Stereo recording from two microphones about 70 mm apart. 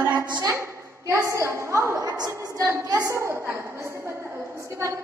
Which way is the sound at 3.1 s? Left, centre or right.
Right.